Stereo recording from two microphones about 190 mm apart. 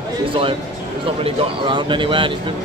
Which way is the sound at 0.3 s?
30° right (ahead or behind).